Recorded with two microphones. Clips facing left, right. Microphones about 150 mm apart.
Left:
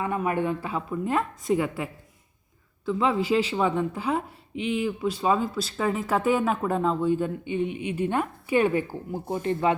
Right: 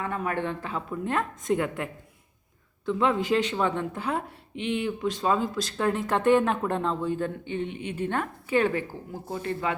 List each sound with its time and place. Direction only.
0.0 s a woman's voice: 15° left (ahead or behind)